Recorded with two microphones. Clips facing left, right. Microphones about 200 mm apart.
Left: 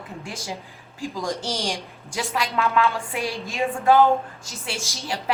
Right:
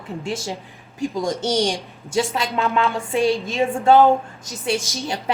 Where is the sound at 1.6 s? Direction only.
30° right (ahead or behind).